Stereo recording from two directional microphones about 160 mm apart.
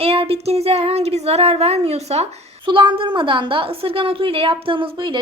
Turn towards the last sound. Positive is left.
turn(degrees=-30)  # may be behind; listen again after turning